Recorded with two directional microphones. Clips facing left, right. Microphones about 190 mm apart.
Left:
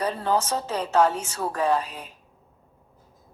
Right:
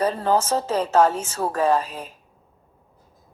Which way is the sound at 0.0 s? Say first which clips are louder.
Right 4 dB; 40° right (ahead or behind).